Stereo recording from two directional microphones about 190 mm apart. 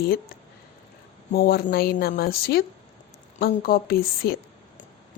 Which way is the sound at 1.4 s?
50° left (ahead or behind).